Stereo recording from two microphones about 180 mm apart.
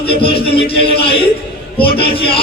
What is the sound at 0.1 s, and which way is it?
Speech, 30° left (ahead or behind).